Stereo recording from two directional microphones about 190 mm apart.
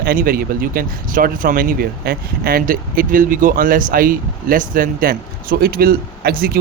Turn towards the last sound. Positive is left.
turn(degrees=-50)  # may be behind; listen again after turning